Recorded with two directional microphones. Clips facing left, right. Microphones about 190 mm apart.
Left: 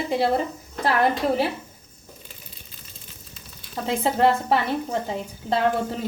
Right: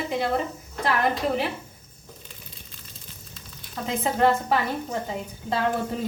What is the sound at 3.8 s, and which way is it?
A woman's voice, 30° left (ahead or behind).